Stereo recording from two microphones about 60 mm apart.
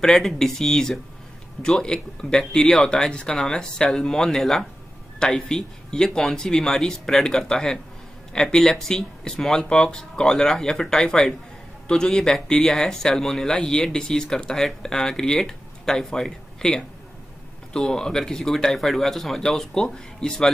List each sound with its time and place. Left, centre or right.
0.0 s speech: centre